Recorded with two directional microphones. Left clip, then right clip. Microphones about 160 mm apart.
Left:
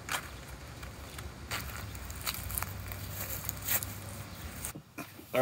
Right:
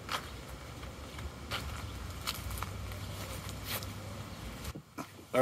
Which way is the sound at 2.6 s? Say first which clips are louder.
Left 1 dB; 70° left (ahead or behind).